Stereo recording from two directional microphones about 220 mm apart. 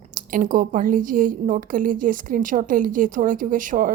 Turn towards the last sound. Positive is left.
turn(degrees=-35)  # may be behind; listen again after turning